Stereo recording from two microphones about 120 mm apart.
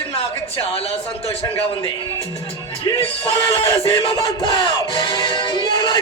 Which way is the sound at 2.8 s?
50° left (ahead or behind).